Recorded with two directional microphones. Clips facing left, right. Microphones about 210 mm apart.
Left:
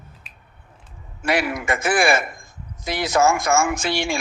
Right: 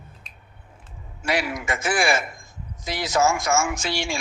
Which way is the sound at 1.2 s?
55° left (ahead or behind).